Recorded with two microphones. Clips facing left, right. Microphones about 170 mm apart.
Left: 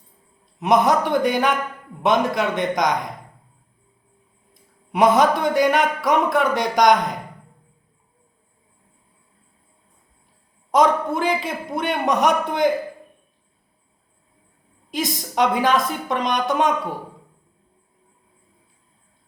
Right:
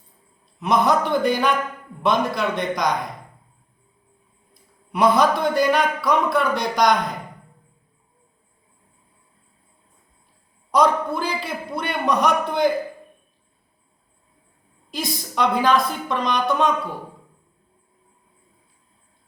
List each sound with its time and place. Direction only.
0.6 s a man's voice: 15° left (ahead or behind)
4.9 s a woman's voice: 20° left (ahead or behind)
10.7 s a man's voice: 20° left (ahead or behind)
14.8 s a woman's voice: 15° left (ahead or behind)